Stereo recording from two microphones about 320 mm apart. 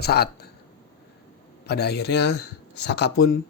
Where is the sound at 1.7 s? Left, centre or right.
Left.